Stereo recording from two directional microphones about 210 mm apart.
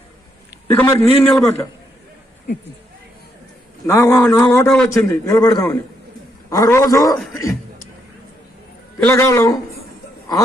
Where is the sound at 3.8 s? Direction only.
10° left (ahead or behind).